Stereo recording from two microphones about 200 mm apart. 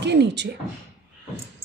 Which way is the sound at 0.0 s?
60° right (ahead or behind).